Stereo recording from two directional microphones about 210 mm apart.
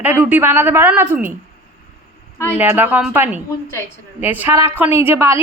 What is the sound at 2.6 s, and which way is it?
A woman's voice, 10° right (ahead or behind).